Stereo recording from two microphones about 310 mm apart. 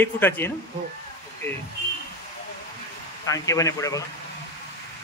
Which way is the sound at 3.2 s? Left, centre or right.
Centre.